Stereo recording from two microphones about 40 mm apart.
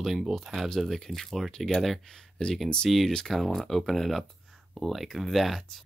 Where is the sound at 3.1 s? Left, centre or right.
Centre.